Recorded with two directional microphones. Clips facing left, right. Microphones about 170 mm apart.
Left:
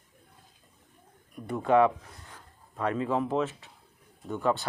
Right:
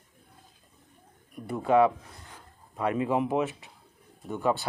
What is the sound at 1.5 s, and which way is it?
Speech, 5° right (ahead or behind).